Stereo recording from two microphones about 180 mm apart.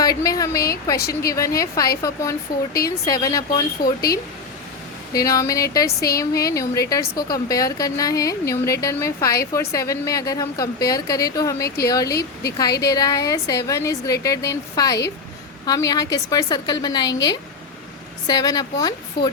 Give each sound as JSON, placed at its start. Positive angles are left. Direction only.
{"t": 0.0, "sound": "a woman's voice", "side_deg": 20}
{"t": 0.9, "sound": "speech", "side_deg": 60}
{"t": 1.3, "sound": "a woman's voice", "side_deg": 20}
{"t": 5.1, "sound": "a woman's voice", "side_deg": 20}
{"t": 18.3, "sound": "a woman's voice", "side_deg": 20}